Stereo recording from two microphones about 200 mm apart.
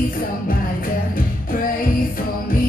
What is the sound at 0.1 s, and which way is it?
Music, 45° left (ahead or behind).